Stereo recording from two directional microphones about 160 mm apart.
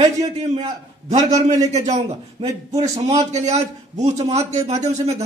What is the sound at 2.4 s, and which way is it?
A man's voice, 40° right (ahead or behind).